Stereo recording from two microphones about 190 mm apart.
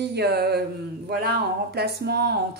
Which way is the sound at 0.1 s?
60° right (ahead or behind).